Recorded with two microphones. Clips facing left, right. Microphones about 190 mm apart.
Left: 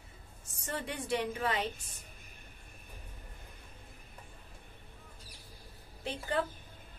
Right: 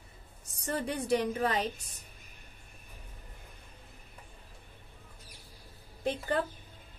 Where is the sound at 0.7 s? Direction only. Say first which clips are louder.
Right 6 dB; 40° right (ahead or behind).